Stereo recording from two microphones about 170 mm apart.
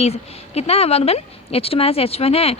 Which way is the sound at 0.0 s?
40° left (ahead or behind).